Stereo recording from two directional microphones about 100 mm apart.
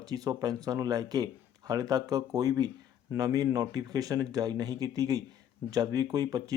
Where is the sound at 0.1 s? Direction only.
40° right (ahead or behind).